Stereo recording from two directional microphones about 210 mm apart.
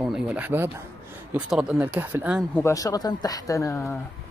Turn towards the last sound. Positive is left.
turn(degrees=15)  # may be behind; listen again after turning